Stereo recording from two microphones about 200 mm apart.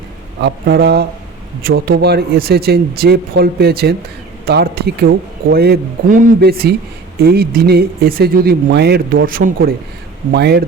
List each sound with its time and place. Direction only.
0.4 s speech: 55° right (ahead or behind)